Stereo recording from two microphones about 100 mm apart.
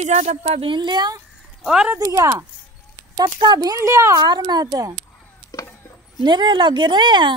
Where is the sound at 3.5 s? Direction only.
35° right (ahead or behind).